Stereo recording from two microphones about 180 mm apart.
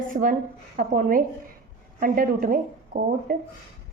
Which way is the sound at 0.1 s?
45° right (ahead or behind).